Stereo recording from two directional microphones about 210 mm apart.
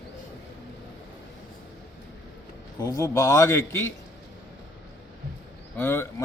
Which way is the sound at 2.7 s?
15° left (ahead or behind).